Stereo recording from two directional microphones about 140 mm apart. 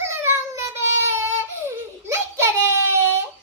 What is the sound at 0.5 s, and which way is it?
Crying, 20° right (ahead or behind).